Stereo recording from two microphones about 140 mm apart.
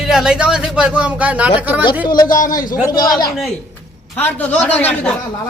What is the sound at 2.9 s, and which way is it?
Speech, 30° left (ahead or behind).